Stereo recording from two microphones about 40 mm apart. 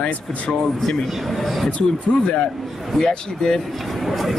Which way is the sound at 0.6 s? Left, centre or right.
Centre.